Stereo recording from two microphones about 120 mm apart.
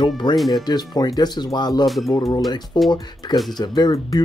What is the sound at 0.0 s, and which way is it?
Speech, 40° left (ahead or behind).